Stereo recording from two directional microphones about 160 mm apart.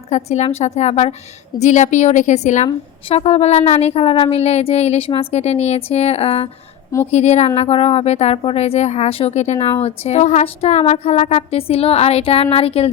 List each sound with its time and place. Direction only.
0.1 s a woman's voice: 45° left (ahead or behind)